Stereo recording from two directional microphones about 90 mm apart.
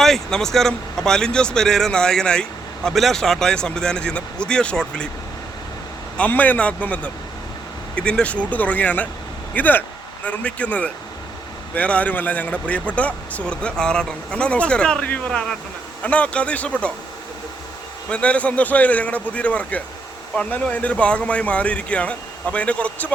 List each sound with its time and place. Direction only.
0.0 s speech: 5° left (ahead or behind)
6.1 s speech: 15° left (ahead or behind)
18.1 s speech: 15° left (ahead or behind)